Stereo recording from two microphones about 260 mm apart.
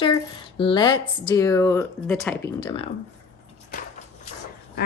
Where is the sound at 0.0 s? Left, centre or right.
Centre.